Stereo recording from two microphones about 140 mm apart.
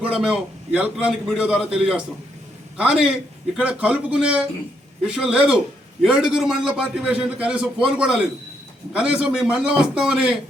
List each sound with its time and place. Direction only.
0.0 s a man's voice: 5° right (ahead or behind)